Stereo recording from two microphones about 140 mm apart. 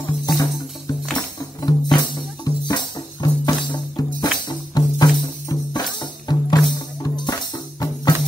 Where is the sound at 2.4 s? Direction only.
30° left (ahead or behind).